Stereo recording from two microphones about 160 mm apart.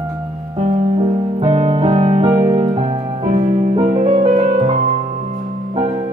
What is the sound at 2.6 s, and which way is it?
Music, 40° right (ahead or behind).